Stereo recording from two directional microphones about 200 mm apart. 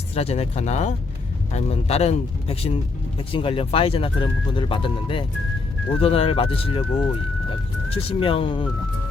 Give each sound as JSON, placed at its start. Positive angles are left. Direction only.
{"t": 0.1, "sound": "speech", "side_deg": 30}
{"t": 7.9, "sound": "speech", "side_deg": 30}